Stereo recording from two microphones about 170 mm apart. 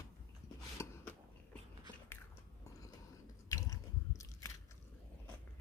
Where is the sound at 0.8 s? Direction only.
20° left (ahead or behind).